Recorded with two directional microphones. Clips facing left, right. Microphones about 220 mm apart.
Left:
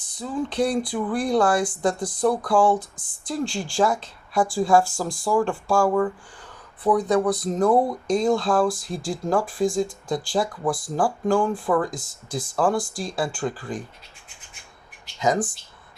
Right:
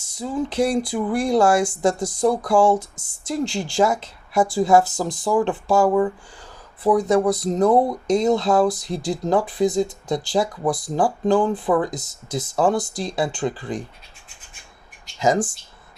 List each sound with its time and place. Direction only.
0.2 s speech: 25° right (ahead or behind)
15.2 s speech: 25° right (ahead or behind)